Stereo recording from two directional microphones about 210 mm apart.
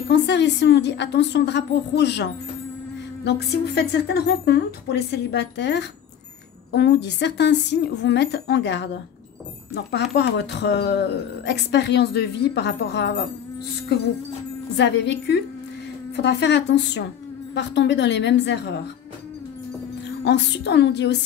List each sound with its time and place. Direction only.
0.1 s speech: 55° left (ahead or behind)
3.3 s a woman's voice: 50° left (ahead or behind)
10.1 s a woman's voice: 55° left (ahead or behind)
14.8 s a woman's voice: 55° left (ahead or behind)
20.2 s speech: 55° left (ahead or behind)